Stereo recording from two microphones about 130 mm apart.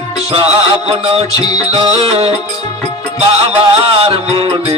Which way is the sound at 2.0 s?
50° right (ahead or behind).